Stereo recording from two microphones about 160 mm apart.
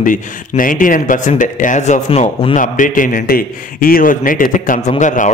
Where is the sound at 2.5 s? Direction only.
55° left (ahead or behind).